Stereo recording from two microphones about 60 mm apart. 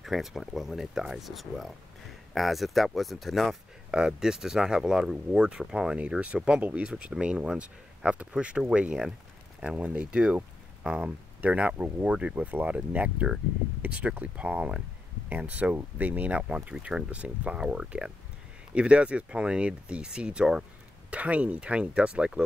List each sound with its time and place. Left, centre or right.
0.0 s speech: centre
3.9 s speech: centre
5.9 s speech: right